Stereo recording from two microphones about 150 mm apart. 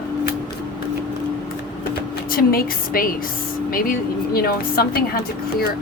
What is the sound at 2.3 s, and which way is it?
Speech, 75° left (ahead or behind).